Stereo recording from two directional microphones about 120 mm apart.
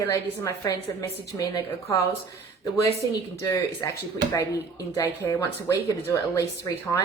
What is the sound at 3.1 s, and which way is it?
Speech, 25° left (ahead or behind).